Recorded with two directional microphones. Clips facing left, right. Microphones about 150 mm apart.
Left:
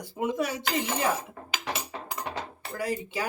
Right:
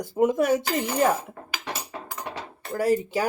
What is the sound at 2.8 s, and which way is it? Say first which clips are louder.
Speech: right 8 dB; 45° right (ahead or behind).